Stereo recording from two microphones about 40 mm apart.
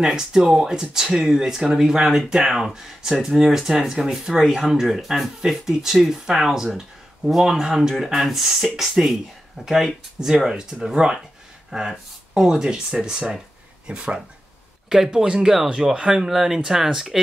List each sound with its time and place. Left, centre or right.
0.0 s speech: centre